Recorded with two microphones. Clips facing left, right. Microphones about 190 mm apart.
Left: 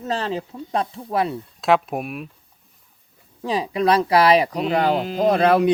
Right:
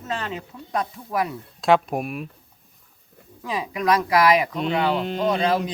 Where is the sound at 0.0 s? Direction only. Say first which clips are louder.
Left 5 dB; 35° left (ahead or behind).